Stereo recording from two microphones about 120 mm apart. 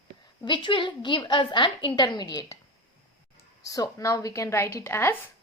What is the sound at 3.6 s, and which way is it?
A woman's voice, 30° left (ahead or behind).